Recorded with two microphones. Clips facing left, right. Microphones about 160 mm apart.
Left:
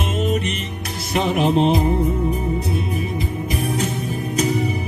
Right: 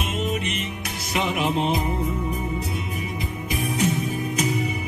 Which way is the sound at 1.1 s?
30° left (ahead or behind).